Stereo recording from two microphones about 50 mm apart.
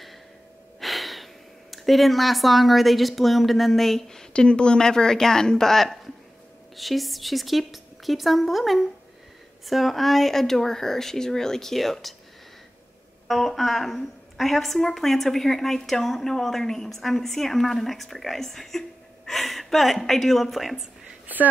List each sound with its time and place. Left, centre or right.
0.7 s a woman's voice: centre
13.3 s a woman's voice: centre
21.3 s speech: right